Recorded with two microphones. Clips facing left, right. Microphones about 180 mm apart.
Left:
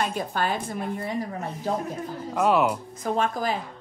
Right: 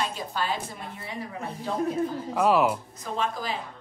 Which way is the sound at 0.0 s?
55° left (ahead or behind).